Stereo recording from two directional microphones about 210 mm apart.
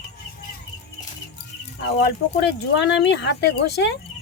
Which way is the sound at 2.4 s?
55° left (ahead or behind).